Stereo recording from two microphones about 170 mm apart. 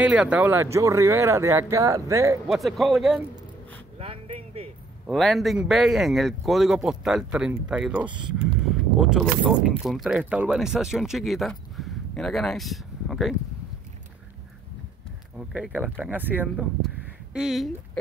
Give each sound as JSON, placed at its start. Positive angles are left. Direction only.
{"t": 0.0, "sound": "speech", "side_deg": -5}
{"t": 2.4, "sound": "speech", "side_deg": 0}
{"t": 4.0, "sound": "a sound", "side_deg": -35}
{"t": 5.0, "sound": "speech", "side_deg": 0}
{"t": 8.6, "sound": "a sound", "side_deg": -5}
{"t": 9.5, "sound": "speech", "side_deg": -5}
{"t": 15.3, "sound": "speech", "side_deg": -5}